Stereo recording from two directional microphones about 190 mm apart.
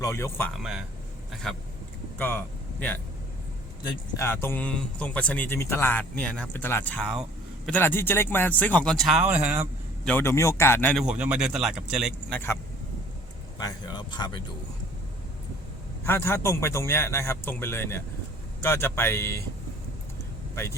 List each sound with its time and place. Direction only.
0.0 s speech: 15° left (ahead or behind)
0.6 s speech: 5° right (ahead or behind); by 2.4 s 10° left (ahead or behind)
4.2 s speech: 10° left (ahead or behind); by 9.6 s 5° right (ahead or behind)
10.0 s speech: 10° left (ahead or behind)
11.0 s speech: 5° right (ahead or behind)
13.6 s speech: 20° left (ahead or behind)
16.0 s speech: 15° left (ahead or behind)